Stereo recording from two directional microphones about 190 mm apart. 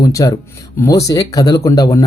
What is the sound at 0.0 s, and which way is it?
Speech, 15° left (ahead or behind).